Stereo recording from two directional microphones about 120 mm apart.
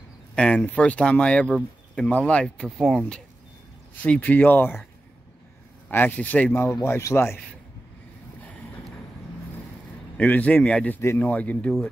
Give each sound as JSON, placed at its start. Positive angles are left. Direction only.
{"t": 0.4, "sound": "speech", "side_deg": 10}
{"t": 2.8, "sound": "speech", "side_deg": -5}
{"t": 4.0, "sound": "speech", "side_deg": 15}
{"t": 5.9, "sound": "a man's voice", "side_deg": 15}
{"t": 10.1, "sound": "speech", "side_deg": 10}
{"t": 11.0, "sound": "speech", "side_deg": 20}